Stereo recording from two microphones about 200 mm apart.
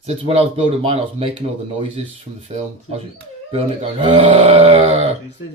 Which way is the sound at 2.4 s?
30° right (ahead or behind).